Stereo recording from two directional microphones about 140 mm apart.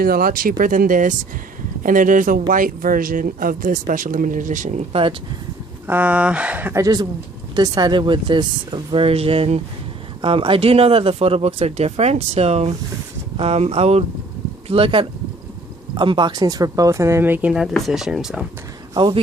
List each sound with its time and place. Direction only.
0.0 s speech: 90° right; by 4.9 s 60° right (ahead or behind)
4.9 s speech: 40° right (ahead or behind)
5.9 s speech: 10° right (ahead or behind)
6.8 s speech: 30° right (ahead or behind); by 18.4 s 5° right (ahead or behind)
18.9 s speech: 35° right (ahead or behind)